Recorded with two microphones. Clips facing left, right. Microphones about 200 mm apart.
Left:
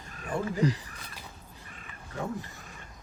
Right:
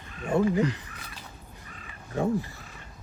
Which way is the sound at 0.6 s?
35° left (ahead or behind).